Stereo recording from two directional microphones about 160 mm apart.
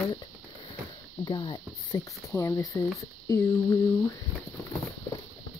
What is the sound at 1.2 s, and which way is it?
Speech, 30° left (ahead or behind).